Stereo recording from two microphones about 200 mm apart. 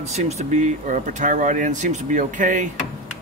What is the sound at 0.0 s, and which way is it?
Speech, 35° right (ahead or behind).